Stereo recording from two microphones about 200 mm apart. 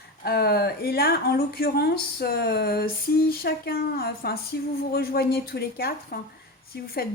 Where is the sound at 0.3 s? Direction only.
50° left (ahead or behind).